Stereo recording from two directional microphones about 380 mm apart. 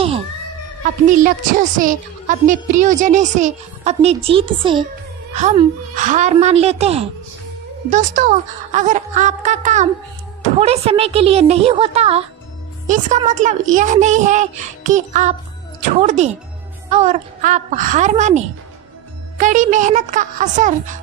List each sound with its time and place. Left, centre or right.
1.0 s speech: right